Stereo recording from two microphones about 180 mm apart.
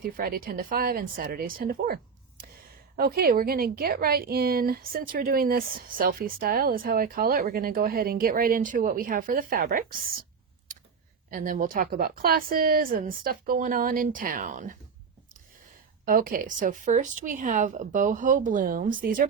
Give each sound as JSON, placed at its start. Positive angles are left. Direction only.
{"t": 0.0, "sound": "speech", "side_deg": -55}
{"t": 11.3, "sound": "speech", "side_deg": -45}
{"t": 16.0, "sound": "speech", "side_deg": -50}